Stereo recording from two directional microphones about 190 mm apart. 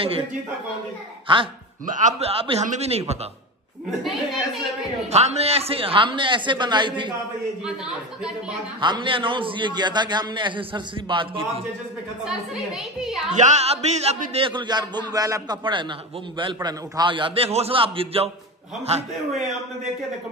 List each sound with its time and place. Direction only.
1.2 s speech: 25° right (ahead or behind)
1.9 s a man's voice: 40° right (ahead or behind)
5.1 s a man's voice: 35° right (ahead or behind)
7.6 s a woman's voice: 5° right (ahead or behind)
8.8 s a man's voice: 25° right (ahead or behind)
12.3 s a woman's voice: 5° right (ahead or behind)
13.3 s a man's voice: 40° right (ahead or behind)